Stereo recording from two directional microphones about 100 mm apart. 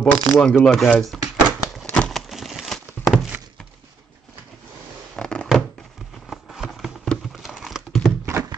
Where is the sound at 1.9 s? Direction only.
10° left (ahead or behind).